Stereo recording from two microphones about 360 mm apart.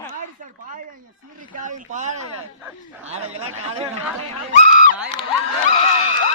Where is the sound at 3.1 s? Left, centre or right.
Right.